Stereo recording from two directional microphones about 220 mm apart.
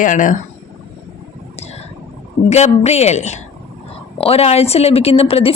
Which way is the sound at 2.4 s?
30° left (ahead or behind).